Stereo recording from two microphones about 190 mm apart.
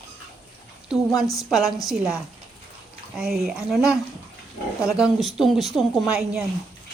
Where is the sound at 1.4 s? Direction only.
Centre (ahead or behind).